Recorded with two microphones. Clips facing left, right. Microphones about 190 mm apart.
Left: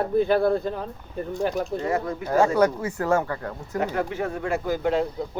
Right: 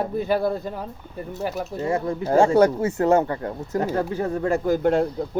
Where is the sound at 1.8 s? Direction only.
30° right (ahead or behind).